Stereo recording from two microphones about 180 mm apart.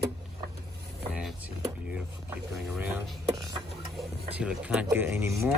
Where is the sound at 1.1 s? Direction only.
Centre (ahead or behind).